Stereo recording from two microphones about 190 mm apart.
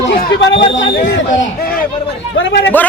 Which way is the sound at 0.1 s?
50° left (ahead or behind).